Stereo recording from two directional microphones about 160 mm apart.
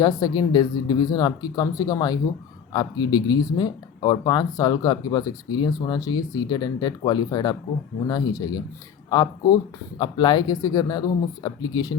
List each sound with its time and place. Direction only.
0.0 s speech: 25° left (ahead or behind)